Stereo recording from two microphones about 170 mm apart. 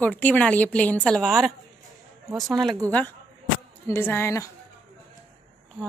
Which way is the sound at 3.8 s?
15° left (ahead or behind).